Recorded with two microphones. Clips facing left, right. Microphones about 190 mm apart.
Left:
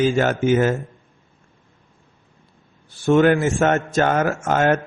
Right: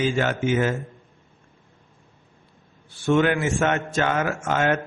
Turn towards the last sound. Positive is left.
turn(degrees=40)  # may be behind; listen again after turning